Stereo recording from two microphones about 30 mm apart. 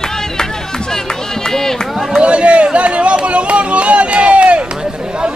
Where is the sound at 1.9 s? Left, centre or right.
Centre.